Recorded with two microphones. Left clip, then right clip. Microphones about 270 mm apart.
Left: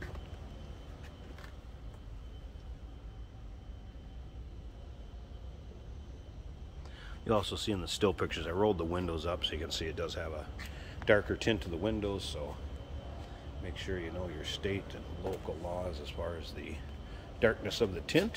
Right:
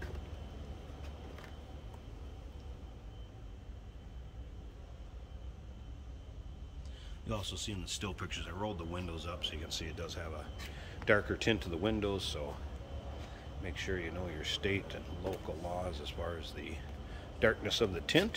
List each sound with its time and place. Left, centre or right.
7.2 s speech: centre
13.7 s speech: centre